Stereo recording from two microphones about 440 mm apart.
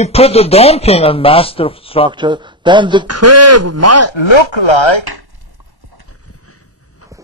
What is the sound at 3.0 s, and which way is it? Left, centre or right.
Speech, right.